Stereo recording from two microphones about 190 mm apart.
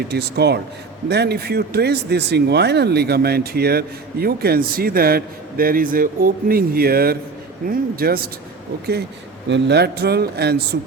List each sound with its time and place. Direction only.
0.1 s speech: 60° right (ahead or behind)
9.5 s speech: 60° right (ahead or behind)